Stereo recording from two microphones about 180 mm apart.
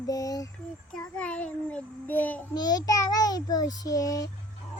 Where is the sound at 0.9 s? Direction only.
5° left (ahead or behind).